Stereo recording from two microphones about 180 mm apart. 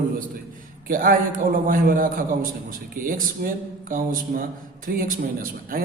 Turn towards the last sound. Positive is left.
turn(degrees=-50)  # may be behind; listen again after turning